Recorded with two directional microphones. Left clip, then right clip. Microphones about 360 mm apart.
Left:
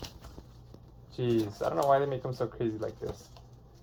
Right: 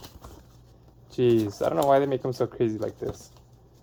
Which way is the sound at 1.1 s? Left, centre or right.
Right.